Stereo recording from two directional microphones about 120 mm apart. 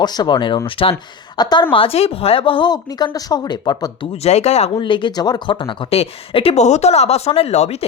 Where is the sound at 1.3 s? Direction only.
35° left (ahead or behind).